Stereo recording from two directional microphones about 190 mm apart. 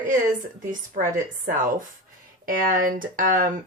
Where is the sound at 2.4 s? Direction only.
50° right (ahead or behind).